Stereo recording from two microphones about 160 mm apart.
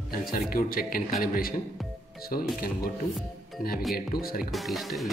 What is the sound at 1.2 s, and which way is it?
Music, 65° left (ahead or behind).